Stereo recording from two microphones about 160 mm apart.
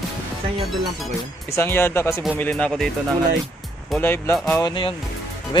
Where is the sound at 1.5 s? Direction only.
15° left (ahead or behind).